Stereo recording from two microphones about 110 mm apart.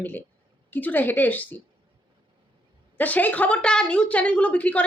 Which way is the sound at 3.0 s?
15° left (ahead or behind).